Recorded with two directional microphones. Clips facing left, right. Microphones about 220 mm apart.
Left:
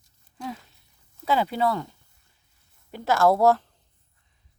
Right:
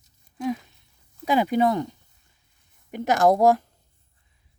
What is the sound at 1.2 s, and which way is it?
Speech, 15° right (ahead or behind).